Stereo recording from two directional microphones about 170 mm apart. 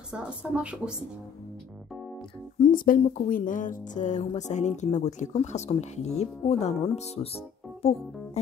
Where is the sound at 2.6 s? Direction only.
55° left (ahead or behind).